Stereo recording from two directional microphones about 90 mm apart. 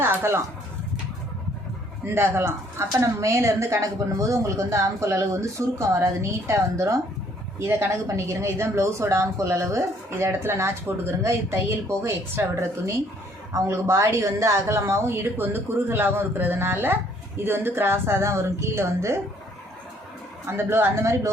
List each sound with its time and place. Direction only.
0.0 s speech: 30° right (ahead or behind)
2.1 s speech: 30° right (ahead or behind)
20.5 s speech: 25° right (ahead or behind)